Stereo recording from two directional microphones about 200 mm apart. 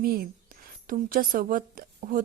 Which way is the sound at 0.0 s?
50° right (ahead or behind).